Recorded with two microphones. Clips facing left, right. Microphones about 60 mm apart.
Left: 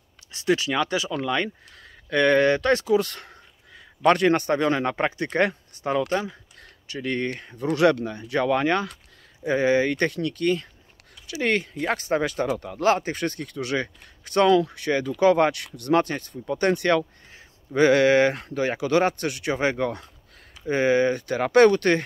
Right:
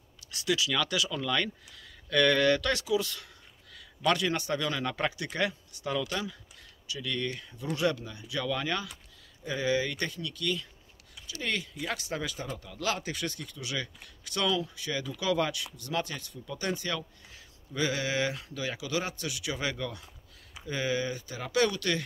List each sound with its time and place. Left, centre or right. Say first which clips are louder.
0.3 s a sound: left 8 dB; left
0.6 s a man's voice: left 5 dB; left
7.6 s a man's voice: left 10 dB; left